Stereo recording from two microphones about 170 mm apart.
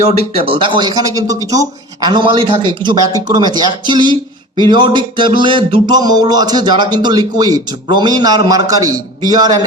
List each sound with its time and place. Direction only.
0.1 s a man's voice: 35° right (ahead or behind)